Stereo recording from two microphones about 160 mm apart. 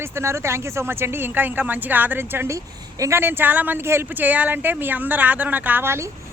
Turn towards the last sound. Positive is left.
turn(degrees=-15)  # may be behind; listen again after turning